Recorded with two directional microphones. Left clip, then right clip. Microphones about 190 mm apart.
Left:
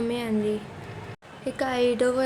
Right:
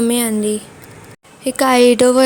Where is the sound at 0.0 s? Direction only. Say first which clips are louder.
Right 9 dB; 40° right (ahead or behind).